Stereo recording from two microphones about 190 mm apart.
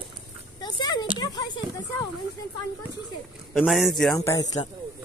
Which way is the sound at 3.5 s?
Centre (ahead or behind).